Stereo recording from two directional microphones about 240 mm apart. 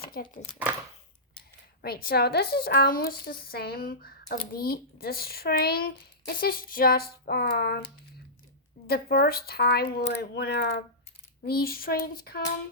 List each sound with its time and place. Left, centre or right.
0.1 s a woman's voice: left
1.8 s a woman's voice: left
8.9 s a woman's voice: left